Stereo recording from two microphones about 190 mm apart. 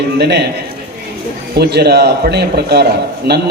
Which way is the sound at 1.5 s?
60° right (ahead or behind).